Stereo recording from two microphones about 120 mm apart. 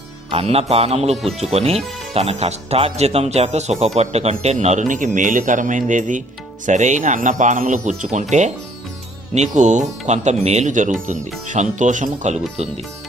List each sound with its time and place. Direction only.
0.3 s speech: 55° right (ahead or behind); by 9.8 s 85° right
10.1 s speech: 70° right (ahead or behind)